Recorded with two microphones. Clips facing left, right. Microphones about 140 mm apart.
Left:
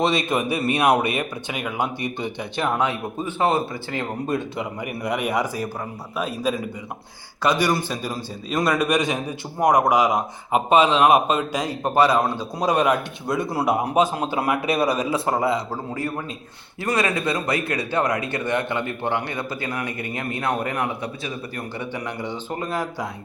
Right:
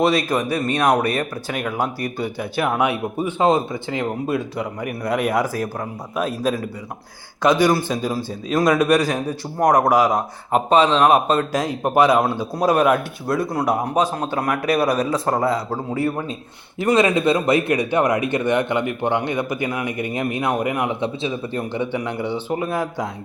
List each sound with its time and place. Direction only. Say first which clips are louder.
0.0 s a man's voice: right 3 dB; centre (ahead or behind); by 4.0 s 15° right (ahead or behind)
4.3 s speech: right 2 dB; centre (ahead or behind)
5.0 s speech: right 3 dB; 10° left (ahead or behind)
7.9 s a man's voice: right 5 dB; 10° right (ahead or behind)
8.4 s speech: right 5 dB; centre (ahead or behind)
11.8 s speech: right 2 dB; 15° right (ahead or behind); by 15.6 s 5° left (ahead or behind)
16.8 s a man's voice: right 6 dB; 20° right (ahead or behind)
21.0 s a man's voice: right 6 dB; 25° right (ahead or behind)